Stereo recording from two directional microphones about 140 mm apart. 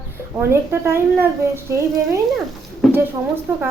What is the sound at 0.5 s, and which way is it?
Speech, 15° right (ahead or behind).